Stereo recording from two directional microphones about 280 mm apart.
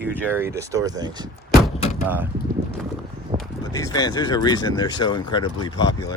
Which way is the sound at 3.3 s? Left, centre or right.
Centre.